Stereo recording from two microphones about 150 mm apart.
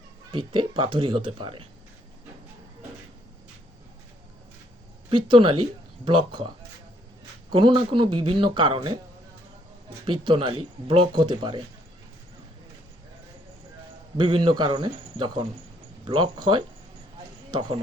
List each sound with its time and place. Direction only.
0.3 s speech: 35° right (ahead or behind)
5.0 s speech: 35° right (ahead or behind)
7.5 s speech: 35° right (ahead or behind)
10.1 s speech: 35° right (ahead or behind)
14.2 s speech: 35° right (ahead or behind)